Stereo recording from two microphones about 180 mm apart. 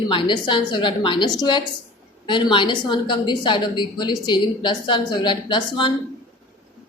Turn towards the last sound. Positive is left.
turn(degrees=25)  # may be behind; listen again after turning